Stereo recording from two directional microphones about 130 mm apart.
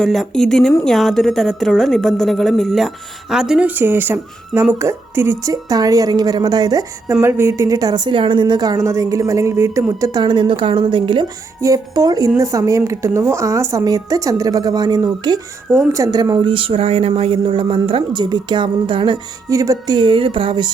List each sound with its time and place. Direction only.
0.0 s a woman's voice: centre (ahead or behind); by 11.3 s 40° right (ahead or behind)
11.6 s a woman's voice: 25° right (ahead or behind)
19.5 s speech: 25° right (ahead or behind)